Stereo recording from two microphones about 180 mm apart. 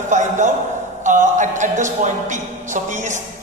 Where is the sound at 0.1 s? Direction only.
45° right (ahead or behind).